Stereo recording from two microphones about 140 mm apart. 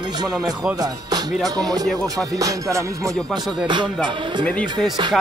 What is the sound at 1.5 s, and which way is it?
Music, 25° right (ahead or behind).